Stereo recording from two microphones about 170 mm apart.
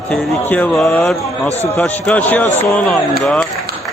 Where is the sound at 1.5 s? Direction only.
40° left (ahead or behind).